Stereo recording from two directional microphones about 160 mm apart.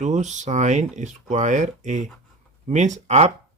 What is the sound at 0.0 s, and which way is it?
Speech, 50° right (ahead or behind).